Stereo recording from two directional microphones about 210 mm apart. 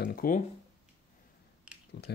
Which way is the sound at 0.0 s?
45° left (ahead or behind).